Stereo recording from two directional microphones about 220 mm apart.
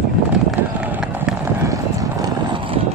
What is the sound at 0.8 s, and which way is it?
Run, 5° right (ahead or behind).